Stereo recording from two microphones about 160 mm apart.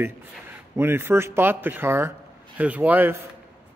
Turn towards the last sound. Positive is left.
turn(degrees=-10)  # may be behind; listen again after turning